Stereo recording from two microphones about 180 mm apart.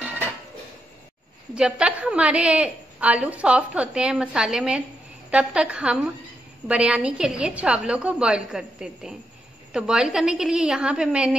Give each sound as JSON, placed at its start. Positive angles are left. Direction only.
{"t": 1.5, "sound": "a woman's voice", "side_deg": -5}